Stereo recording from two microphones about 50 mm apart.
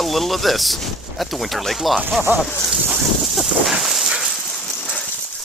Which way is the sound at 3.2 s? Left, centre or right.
Centre.